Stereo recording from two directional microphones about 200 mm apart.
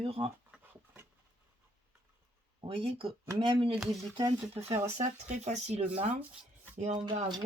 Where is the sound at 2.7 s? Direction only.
25° right (ahead or behind).